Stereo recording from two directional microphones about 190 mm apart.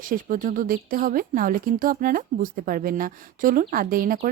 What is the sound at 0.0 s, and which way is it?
Speech, 45° right (ahead or behind).